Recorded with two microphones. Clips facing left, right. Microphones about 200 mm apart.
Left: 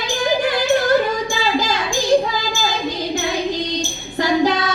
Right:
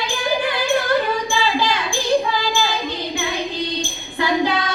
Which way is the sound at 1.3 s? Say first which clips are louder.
Even; 40° left (ahead or behind).